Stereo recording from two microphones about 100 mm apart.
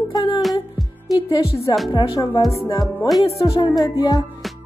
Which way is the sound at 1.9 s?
50° left (ahead or behind).